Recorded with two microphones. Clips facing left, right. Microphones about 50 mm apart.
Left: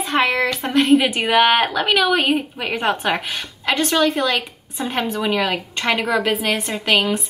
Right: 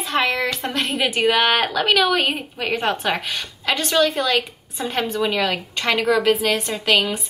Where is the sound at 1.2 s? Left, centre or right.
Centre.